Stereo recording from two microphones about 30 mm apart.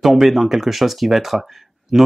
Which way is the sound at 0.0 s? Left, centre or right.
Centre.